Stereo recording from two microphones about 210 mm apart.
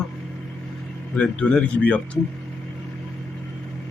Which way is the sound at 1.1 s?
5° left (ahead or behind).